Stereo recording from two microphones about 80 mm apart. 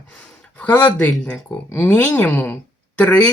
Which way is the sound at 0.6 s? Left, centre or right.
Left.